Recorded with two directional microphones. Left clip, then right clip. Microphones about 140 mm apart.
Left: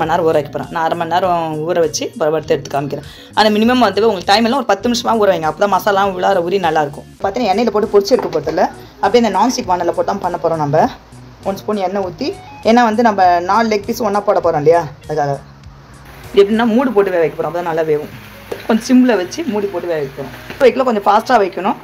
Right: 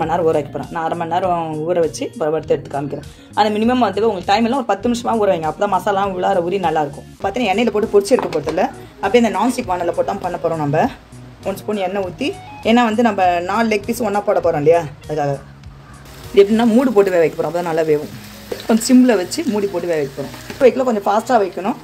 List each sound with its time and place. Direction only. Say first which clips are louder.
0.0 s speech: left 3 dB; 5° right (ahead or behind)
7.2 s a woman's voice: left 3 dB; 25° right (ahead or behind)
9.0 s speech: left 3 dB; 10° right (ahead or behind)
10.3 s a woman's voice: left 4 dB; 20° right (ahead or behind)
16.3 s speech: left 1 dB; 25° right (ahead or behind)
19.3 s speech: left 1 dB; 45° right (ahead or behind)
20.6 s speech: left 2 dB; 10° right (ahead or behind)